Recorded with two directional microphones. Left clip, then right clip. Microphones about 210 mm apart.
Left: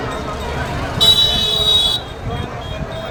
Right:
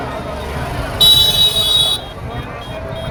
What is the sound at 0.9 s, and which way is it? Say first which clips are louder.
Vehicle: right 3 dB; 45° right (ahead or behind).